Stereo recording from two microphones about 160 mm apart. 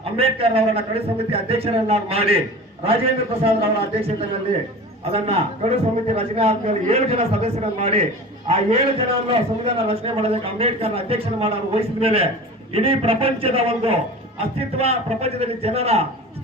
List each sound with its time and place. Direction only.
0.0 s a man's voice: 35° right (ahead or behind)
5.1 s a man's voice: 40° right (ahead or behind)